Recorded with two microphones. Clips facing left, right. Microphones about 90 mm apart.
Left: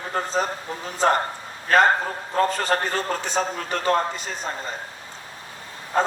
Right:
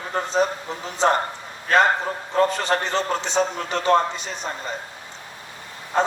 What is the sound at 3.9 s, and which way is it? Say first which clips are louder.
Speech: right 4 dB; 25° right (ahead or behind).